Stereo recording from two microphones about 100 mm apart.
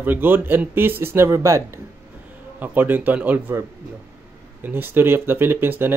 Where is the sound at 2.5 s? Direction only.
20° right (ahead or behind).